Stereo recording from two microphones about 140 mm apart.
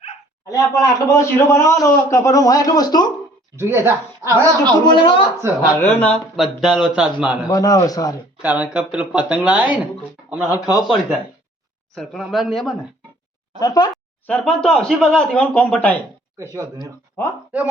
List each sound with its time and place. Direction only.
0.5 s a man's voice: 25° left (ahead or behind)
3.5 s speech: 20° right (ahead or behind)
4.9 s a man's voice: 35° left (ahead or behind)
5.9 s speech: 10° left (ahead or behind)
6.3 s speech: centre (ahead or behind)
7.4 s a man's voice: 25° left (ahead or behind)
8.4 s speech: 10° right (ahead or behind)
10.5 s a man's voice: 25° left (ahead or behind)
10.8 s speech: centre (ahead or behind)
13.6 s a man's voice: 30° left (ahead or behind)
14.3 s speech: 5° left (ahead or behind)
17.2 s speech: 15° left (ahead or behind)